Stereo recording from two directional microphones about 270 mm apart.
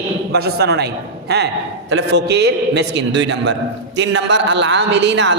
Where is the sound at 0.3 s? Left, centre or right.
Right.